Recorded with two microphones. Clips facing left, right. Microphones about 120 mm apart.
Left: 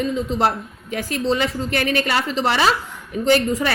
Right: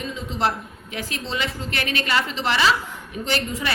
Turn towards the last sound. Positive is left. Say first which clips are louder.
# left 8 dB
turn(degrees=45)  # may be behind; listen again after turning